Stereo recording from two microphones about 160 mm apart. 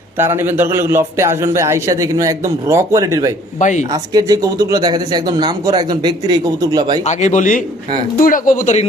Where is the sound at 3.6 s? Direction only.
50° left (ahead or behind).